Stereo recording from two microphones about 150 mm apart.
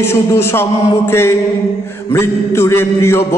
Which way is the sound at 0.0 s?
15° left (ahead or behind).